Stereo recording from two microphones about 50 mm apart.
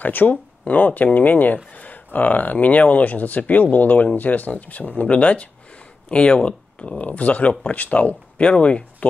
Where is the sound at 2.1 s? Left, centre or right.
Left.